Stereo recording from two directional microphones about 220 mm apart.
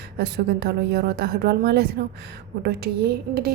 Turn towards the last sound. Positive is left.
turn(degrees=-45)  # may be behind; listen again after turning